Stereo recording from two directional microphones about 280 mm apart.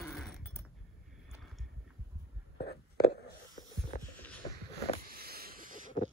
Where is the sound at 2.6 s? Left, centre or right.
Left.